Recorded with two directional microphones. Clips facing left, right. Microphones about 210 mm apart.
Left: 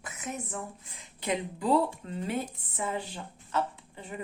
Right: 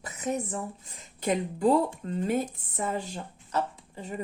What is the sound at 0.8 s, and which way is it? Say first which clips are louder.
Speech: right 4 dB; 45° right (ahead or behind).